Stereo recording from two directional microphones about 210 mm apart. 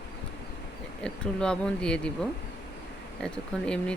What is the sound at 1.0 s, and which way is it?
Speech, 5° left (ahead or behind).